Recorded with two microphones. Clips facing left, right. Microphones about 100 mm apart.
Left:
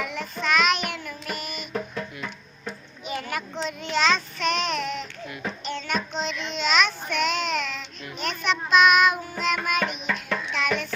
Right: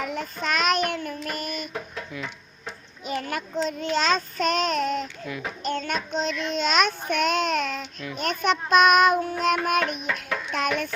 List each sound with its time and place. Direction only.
0.0 s child singing: 45° right (ahead or behind)
3.2 s child singing: 40° right (ahead or behind)
9.4 s music: 45° right (ahead or behind)
10.5 s a sound: 45° right (ahead or behind)